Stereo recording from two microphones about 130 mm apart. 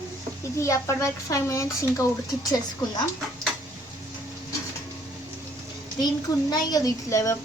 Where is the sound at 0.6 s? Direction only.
25° left (ahead or behind).